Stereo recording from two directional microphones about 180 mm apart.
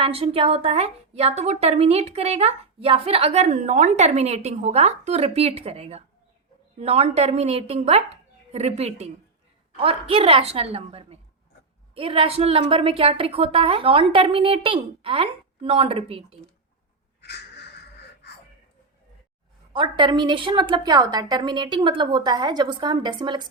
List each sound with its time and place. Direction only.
0.0 s a woman's voice: 30° right (ahead or behind)
17.2 s crow: 65° left (ahead or behind)
19.7 s a woman's voice: 25° right (ahead or behind)